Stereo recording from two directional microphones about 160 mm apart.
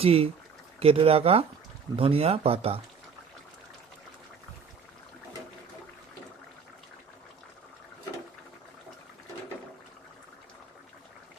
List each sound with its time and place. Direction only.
0.0 s speech: 40° right (ahead or behind)